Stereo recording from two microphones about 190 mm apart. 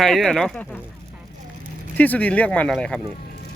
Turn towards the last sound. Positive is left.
turn(degrees=5)  # may be behind; listen again after turning